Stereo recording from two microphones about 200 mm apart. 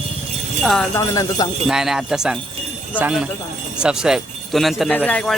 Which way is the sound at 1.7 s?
Centre (ahead or behind).